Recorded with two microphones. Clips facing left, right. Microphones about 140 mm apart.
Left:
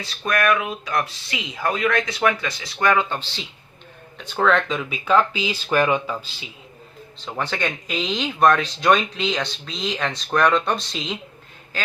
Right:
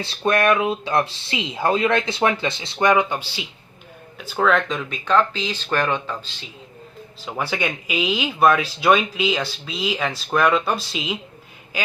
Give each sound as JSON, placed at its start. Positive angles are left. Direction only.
{"t": 0.0, "sound": "speech", "side_deg": -30}
{"t": 7.3, "sound": "speech", "side_deg": -10}